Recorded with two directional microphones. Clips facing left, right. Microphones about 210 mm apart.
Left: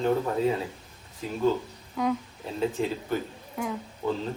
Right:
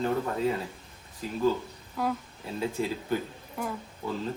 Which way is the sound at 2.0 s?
5° right (ahead or behind).